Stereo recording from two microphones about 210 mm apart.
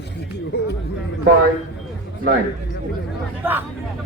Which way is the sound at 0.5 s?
55° left (ahead or behind).